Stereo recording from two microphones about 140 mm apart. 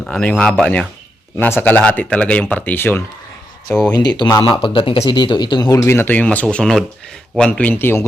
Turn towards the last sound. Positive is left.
turn(degrees=15)  # may be behind; listen again after turning